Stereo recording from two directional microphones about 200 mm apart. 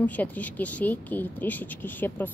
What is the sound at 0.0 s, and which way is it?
A woman's voice, 10° left (ahead or behind).